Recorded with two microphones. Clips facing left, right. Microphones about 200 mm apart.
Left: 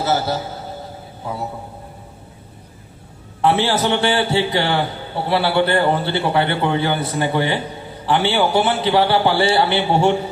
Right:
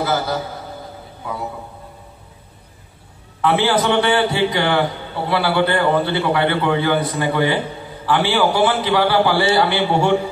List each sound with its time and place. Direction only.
0.0 s a man's voice: 30° left (ahead or behind)
3.3 s a man's voice: 30° left (ahead or behind)